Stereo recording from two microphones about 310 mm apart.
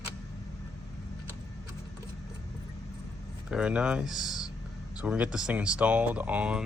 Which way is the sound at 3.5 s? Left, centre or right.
Centre.